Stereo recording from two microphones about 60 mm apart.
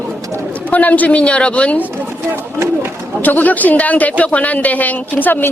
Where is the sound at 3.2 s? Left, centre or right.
Left.